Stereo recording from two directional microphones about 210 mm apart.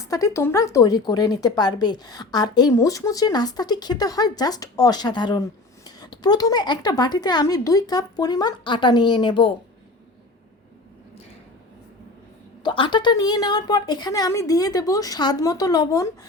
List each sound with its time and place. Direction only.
0.1 s speech: 15° left (ahead or behind)
12.6 s speech: 25° left (ahead or behind)